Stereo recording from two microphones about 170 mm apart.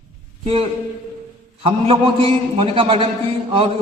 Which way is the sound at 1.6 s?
30° right (ahead or behind).